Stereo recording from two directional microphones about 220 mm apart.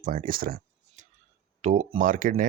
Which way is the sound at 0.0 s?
40° right (ahead or behind).